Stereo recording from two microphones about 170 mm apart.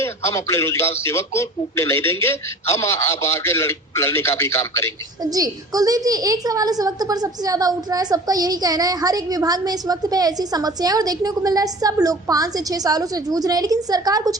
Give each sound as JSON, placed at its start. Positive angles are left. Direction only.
{"t": 0.0, "sound": "a man's voice", "side_deg": 15}
{"t": 5.2, "sound": "a woman's voice", "side_deg": -20}